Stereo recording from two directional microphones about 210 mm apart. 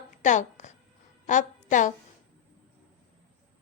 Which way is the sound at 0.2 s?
35° left (ahead or behind).